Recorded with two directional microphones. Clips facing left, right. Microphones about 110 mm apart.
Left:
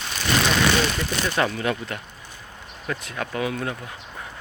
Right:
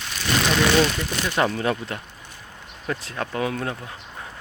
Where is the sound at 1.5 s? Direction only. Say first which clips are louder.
Right 1 dB; 30° right (ahead or behind).